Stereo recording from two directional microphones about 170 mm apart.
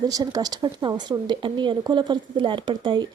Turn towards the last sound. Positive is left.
turn(degrees=-25)  # may be behind; listen again after turning